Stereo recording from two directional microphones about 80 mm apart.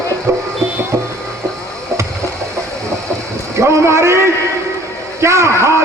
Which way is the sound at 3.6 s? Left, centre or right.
Right.